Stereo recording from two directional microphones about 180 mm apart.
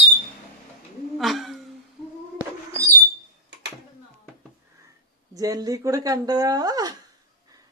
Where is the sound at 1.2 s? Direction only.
Centre (ahead or behind).